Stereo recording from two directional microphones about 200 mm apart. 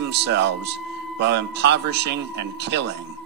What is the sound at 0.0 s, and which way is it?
Speech, 60° right (ahead or behind).